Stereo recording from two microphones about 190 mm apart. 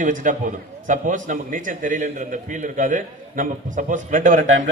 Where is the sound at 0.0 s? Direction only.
45° right (ahead or behind).